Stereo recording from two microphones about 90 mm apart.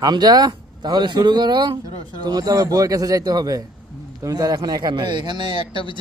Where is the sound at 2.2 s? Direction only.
45° right (ahead or behind).